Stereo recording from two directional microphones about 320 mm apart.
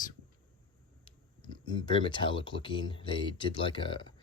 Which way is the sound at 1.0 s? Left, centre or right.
Centre.